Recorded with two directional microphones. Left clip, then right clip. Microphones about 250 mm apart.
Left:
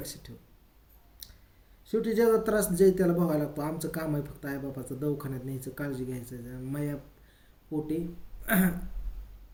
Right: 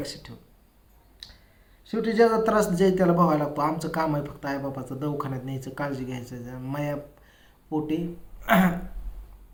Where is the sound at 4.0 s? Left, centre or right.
Right.